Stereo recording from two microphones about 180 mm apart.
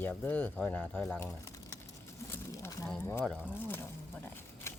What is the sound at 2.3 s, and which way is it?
Pigeon, 15° left (ahead or behind).